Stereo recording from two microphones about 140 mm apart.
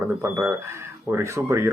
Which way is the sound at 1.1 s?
20° right (ahead or behind).